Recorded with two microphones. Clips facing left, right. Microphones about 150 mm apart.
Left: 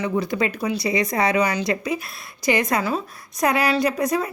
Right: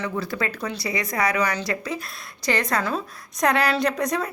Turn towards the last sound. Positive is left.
turn(degrees=5)  # may be behind; listen again after turning